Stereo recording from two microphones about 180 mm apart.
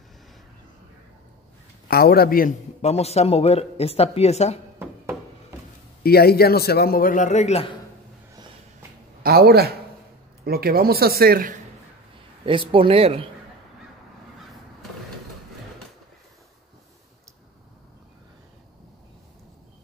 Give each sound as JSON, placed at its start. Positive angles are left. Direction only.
{"t": 1.9, "sound": "a man's voice", "side_deg": 60}
{"t": 2.8, "sound": "speech", "side_deg": 35}
{"t": 6.0, "sound": "a man's voice", "side_deg": 60}
{"t": 9.2, "sound": "speech", "side_deg": -60}
{"t": 12.4, "sound": "speech", "side_deg": -30}